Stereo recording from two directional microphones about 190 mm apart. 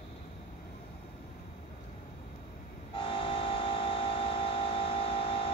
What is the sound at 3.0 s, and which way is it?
Train, 30° left (ahead or behind).